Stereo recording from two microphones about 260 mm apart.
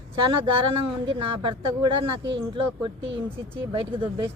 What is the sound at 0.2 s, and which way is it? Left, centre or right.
Speech, right.